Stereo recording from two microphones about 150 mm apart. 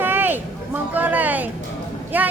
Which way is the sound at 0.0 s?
15° right (ahead or behind).